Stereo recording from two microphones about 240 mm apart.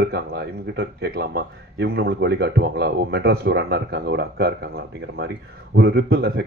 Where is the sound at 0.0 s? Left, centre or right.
Right.